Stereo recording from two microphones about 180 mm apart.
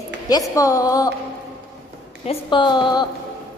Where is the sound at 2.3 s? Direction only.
25° left (ahead or behind).